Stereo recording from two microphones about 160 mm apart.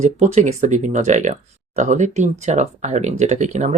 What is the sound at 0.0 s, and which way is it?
Speech, 45° right (ahead or behind).